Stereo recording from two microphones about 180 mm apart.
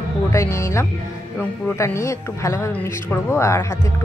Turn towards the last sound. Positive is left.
turn(degrees=15)  # may be behind; listen again after turning